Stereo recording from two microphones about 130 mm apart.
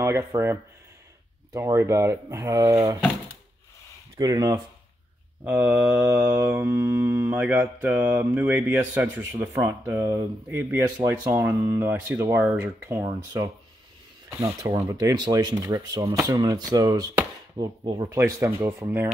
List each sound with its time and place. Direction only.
0.0 s speech: 20° right (ahead or behind)
4.2 s speech: 30° right (ahead or behind)
5.4 s mantra: 10° right (ahead or behind)
10.6 s speech: 20° right (ahead or behind)
13.0 s speech: 30° right (ahead or behind)
18.1 s speech: 20° right (ahead or behind)